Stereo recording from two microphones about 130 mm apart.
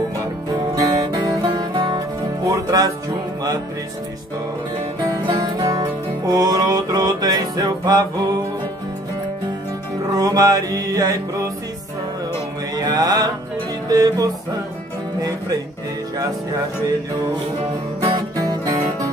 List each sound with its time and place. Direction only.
1.4 s music: 35° right (ahead or behind)
5.0 s music: 35° right (ahead or behind)
10.1 s music: 30° right (ahead or behind)
12.7 s music: 30° right (ahead or behind)
18.0 s music: 35° right (ahead or behind)